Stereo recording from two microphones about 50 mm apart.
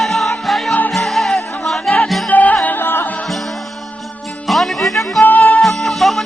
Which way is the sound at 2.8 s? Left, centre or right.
Left.